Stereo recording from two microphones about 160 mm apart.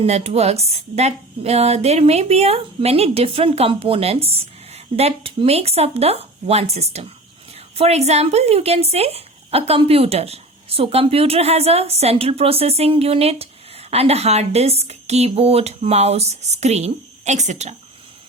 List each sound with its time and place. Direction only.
0.0 s speech: 40° right (ahead or behind)